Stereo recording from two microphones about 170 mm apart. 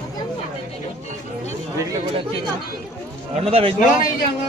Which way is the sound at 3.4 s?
35° right (ahead or behind).